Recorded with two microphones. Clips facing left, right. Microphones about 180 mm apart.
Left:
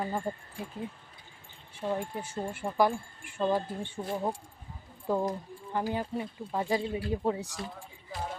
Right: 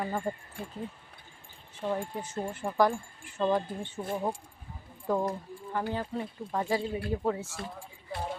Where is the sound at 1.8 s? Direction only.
10° left (ahead or behind).